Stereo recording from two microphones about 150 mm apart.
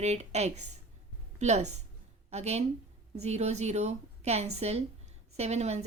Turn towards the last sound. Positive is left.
turn(degrees=-45)  # may be behind; listen again after turning